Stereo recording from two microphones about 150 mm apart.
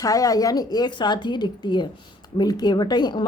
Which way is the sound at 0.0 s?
25° left (ahead or behind).